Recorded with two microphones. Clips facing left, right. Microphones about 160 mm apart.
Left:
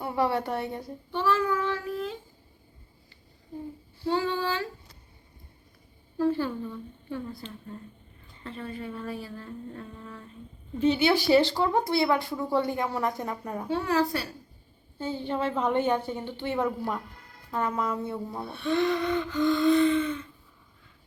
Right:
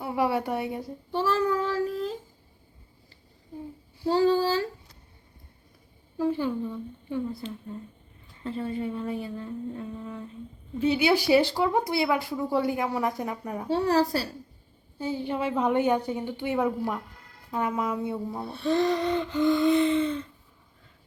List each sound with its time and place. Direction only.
0.0 s a woman's voice: 5° right (ahead or behind)
1.1 s child singing: 35° right (ahead or behind)
4.0 s gasp: 35° right (ahead or behind)
6.1 s a woman's voice: 15° right (ahead or behind)
8.4 s a woman's voice: 25° right (ahead or behind)
13.7 s gasp: 35° right (ahead or behind)
14.9 s a woman's voice: 10° right (ahead or behind)
18.4 s gasp: 35° right (ahead or behind)